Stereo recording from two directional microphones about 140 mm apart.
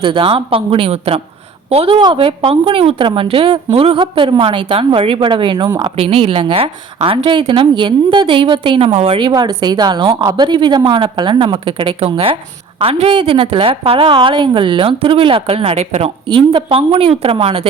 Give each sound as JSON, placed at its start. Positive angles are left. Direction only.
{"t": 0.0, "sound": "a woman's voice", "side_deg": -35}
{"t": 9.2, "sound": "a woman's voice", "side_deg": -30}